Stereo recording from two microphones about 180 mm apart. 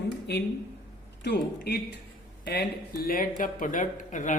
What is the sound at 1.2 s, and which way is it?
Speech, 65° left (ahead or behind).